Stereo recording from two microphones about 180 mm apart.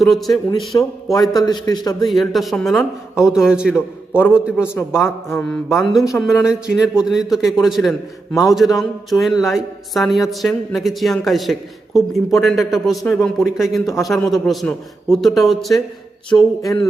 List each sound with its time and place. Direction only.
0.0 s a man's voice: centre (ahead or behind)
0.7 s a man's voice: 15° left (ahead or behind)
2.0 s a man's voice: centre (ahead or behind)
4.5 s a man's voice: 15° left (ahead or behind)
5.9 s a man's voice: centre (ahead or behind)
16.3 s a man's voice: 20° left (ahead or behind)